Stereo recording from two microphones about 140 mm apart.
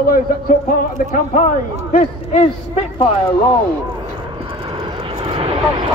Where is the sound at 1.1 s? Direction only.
55° left (ahead or behind).